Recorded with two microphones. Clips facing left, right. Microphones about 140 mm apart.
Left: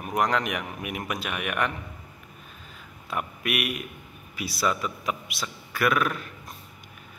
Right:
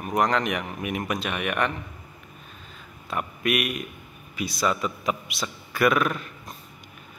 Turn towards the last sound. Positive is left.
turn(degrees=0)  # may be behind; listen again after turning